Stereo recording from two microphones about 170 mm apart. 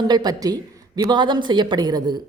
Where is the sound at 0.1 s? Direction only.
25° right (ahead or behind).